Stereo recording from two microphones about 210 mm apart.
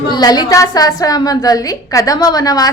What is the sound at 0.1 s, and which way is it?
A woman's voice, 20° left (ahead or behind).